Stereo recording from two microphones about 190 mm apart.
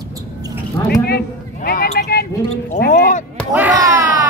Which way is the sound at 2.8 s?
45° left (ahead or behind).